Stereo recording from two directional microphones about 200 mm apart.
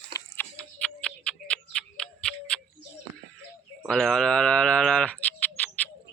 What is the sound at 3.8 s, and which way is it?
Bird, centre (ahead or behind).